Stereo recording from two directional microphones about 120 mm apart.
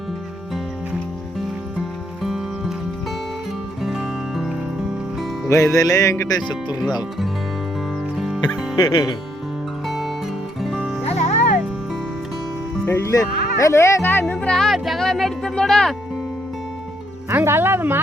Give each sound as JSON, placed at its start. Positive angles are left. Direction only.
{"t": 2.2, "sound": "music", "side_deg": 0}
{"t": 3.8, "sound": "music", "side_deg": -5}
{"t": 5.5, "sound": "speech", "side_deg": 25}
{"t": 9.8, "sound": "music", "side_deg": 0}
{"t": 11.0, "sound": "music", "side_deg": 65}
{"t": 12.8, "sound": "speech", "side_deg": 20}
{"t": 14.3, "sound": "speech", "side_deg": 5}
{"t": 17.2, "sound": "speech", "side_deg": -20}